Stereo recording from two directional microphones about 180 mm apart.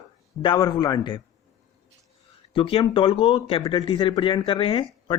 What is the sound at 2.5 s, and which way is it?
Speech, 30° left (ahead or behind).